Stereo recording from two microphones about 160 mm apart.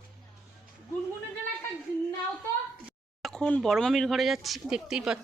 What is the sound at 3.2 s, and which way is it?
A woman's voice, 5° left (ahead or behind).